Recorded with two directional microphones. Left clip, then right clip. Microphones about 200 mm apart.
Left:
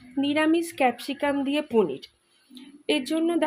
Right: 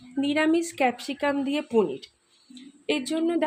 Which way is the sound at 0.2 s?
5° left (ahead or behind).